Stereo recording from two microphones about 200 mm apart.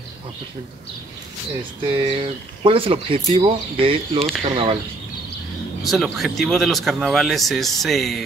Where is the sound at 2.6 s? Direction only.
25° right (ahead or behind).